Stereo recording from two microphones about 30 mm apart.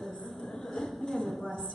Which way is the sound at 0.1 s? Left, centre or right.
Centre.